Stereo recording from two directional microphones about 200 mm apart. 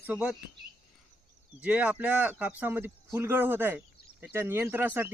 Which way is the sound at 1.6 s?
5° right (ahead or behind).